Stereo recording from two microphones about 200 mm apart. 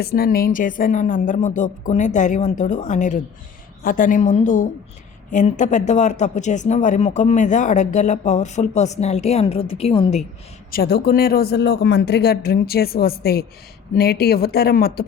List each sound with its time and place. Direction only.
0.0 s speech: 50° left (ahead or behind); by 10.2 s 30° left (ahead or behind)
10.7 s a man's voice: 50° left (ahead or behind)